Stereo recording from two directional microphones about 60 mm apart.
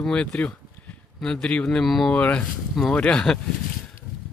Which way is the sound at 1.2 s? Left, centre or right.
Centre.